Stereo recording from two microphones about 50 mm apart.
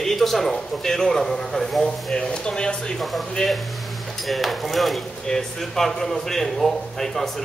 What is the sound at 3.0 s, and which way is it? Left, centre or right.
A man's voice, centre.